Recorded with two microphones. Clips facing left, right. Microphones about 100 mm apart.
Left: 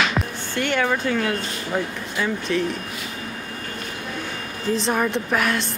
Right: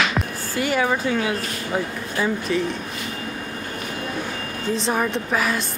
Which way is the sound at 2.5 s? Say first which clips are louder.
Left 1 dB; 5° right (ahead or behind).